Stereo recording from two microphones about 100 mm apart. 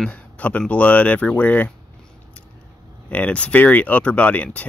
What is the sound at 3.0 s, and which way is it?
Speech, 15° left (ahead or behind).